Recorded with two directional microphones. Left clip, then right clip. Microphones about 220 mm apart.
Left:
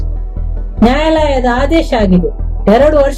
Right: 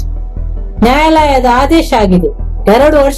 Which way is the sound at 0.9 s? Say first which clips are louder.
Right 4 dB; 5° left (ahead or behind).